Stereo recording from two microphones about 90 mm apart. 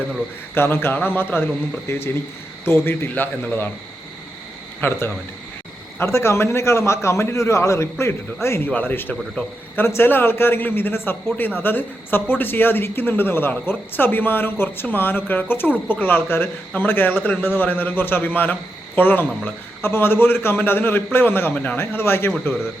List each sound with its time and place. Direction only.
0.5 s a man's voice: 25° left (ahead or behind)
4.8 s a man's voice: 25° left (ahead or behind)